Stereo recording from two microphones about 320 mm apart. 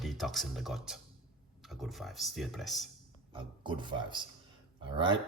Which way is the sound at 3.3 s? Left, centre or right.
Centre.